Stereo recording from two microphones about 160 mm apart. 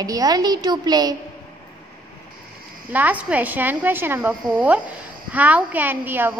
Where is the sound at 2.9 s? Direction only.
10° right (ahead or behind).